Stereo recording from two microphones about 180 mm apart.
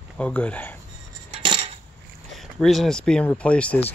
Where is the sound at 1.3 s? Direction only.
30° right (ahead or behind).